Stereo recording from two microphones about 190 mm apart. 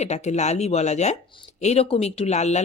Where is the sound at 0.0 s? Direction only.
35° left (ahead or behind).